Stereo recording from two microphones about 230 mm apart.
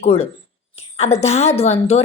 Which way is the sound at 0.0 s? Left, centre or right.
Left.